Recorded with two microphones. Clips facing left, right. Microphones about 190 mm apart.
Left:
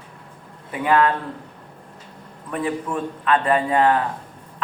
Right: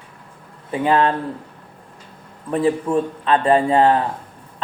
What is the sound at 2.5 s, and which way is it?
A man's voice, 30° right (ahead or behind).